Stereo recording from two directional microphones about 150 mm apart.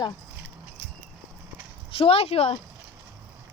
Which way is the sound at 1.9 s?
40° left (ahead or behind).